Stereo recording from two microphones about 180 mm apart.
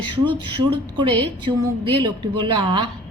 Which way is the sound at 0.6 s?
25° right (ahead or behind).